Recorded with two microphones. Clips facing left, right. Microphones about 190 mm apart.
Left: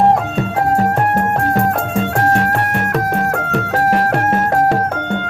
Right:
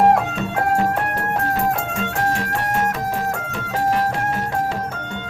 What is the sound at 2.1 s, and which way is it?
Music, 55° left (ahead or behind).